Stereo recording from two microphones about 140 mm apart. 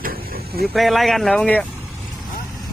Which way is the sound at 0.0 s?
90° right.